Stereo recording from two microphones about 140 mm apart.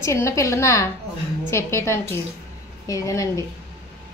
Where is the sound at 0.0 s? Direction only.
20° left (ahead or behind).